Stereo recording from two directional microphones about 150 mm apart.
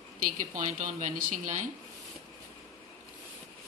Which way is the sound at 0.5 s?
55° right (ahead or behind).